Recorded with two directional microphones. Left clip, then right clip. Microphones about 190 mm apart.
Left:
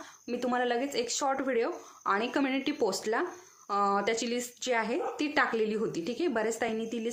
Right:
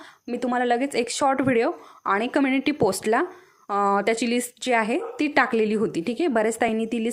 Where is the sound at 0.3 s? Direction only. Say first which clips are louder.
Right 7 dB; 30° right (ahead or behind).